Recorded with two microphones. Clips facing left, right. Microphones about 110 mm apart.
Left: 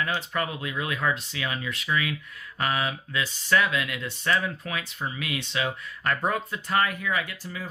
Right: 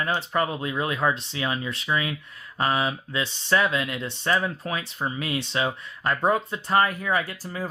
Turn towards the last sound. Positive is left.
turn(degrees=-40)  # may be behind; listen again after turning